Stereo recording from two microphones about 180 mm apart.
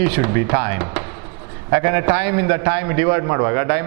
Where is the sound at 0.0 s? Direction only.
15° right (ahead or behind).